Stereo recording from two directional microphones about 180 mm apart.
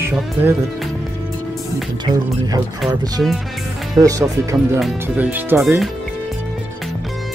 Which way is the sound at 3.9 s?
20° right (ahead or behind).